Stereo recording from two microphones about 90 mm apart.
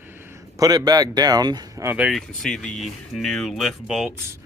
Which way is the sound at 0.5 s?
45° right (ahead or behind).